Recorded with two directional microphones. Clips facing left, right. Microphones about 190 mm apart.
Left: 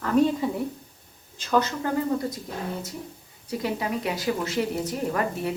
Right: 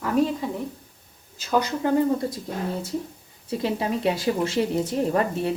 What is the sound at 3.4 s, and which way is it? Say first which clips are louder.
A woman's voice: right 3 dB; 25° right (ahead or behind).